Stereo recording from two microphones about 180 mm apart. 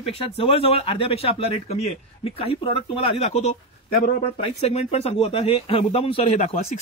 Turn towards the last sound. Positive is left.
turn(degrees=35)  # may be behind; listen again after turning